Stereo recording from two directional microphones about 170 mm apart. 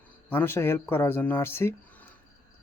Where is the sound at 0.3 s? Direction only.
15° left (ahead or behind).